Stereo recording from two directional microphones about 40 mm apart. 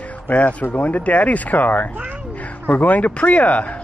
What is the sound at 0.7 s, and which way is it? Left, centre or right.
Speech, left.